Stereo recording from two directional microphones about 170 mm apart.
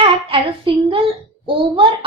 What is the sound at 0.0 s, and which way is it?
A woman's voice, 30° right (ahead or behind).